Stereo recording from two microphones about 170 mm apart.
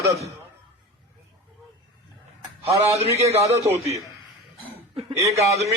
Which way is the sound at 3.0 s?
35° right (ahead or behind).